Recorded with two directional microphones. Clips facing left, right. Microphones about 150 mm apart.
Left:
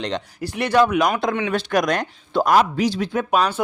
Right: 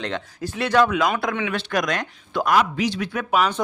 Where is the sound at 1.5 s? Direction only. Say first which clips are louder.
Left 4 dB; 40° left (ahead or behind).